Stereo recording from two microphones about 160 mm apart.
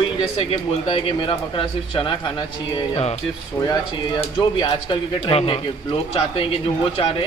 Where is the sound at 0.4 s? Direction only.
35° left (ahead or behind).